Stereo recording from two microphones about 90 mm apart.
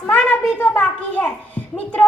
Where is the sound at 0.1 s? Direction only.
20° left (ahead or behind).